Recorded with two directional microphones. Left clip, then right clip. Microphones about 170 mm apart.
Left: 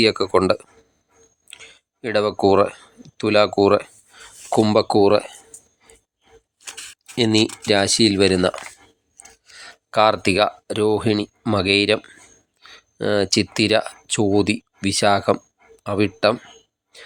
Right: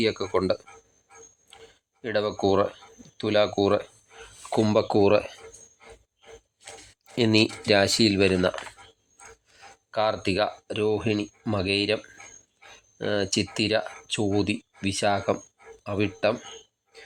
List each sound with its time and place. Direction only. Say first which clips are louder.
0.0 s speech: left 8 dB; 25° left (ahead or behind)
7.2 s speech: left 4 dB; 10° left (ahead or behind)
9.9 s speech: left 9 dB; 35° left (ahead or behind)
16.9 s a sound: left 5 dB; 25° left (ahead or behind)